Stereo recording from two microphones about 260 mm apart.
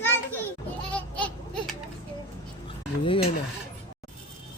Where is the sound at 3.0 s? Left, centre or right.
Centre.